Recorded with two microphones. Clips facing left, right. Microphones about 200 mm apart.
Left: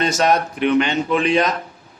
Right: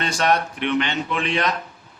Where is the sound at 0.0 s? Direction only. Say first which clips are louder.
Left 4 dB; 40° left (ahead or behind).